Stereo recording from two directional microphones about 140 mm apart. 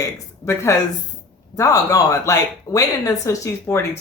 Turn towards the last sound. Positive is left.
turn(degrees=20)  # may be behind; listen again after turning